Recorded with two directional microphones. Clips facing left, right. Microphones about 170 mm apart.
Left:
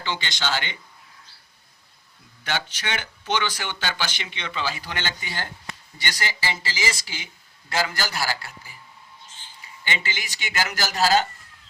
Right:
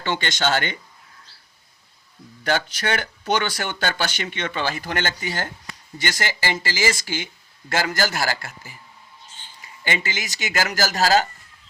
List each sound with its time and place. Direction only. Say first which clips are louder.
0.0 s speech: right 5 dB; 50° right (ahead or behind)
2.4 s speech: right 6 dB; 45° right (ahead or behind)
9.8 s speech: right 4 dB; 45° right (ahead or behind)